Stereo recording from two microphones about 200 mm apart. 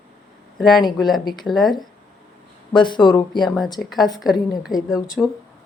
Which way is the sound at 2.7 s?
25° left (ahead or behind).